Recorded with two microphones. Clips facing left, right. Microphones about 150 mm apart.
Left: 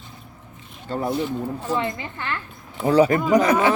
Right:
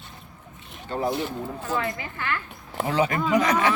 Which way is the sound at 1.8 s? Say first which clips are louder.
Left 2 dB; 25° left (ahead or behind).